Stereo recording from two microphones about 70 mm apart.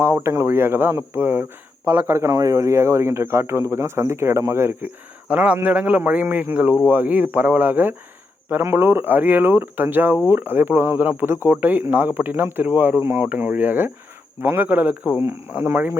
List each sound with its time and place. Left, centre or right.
0.0 s speech: right
2.3 s speech: right
5.3 s speech: centre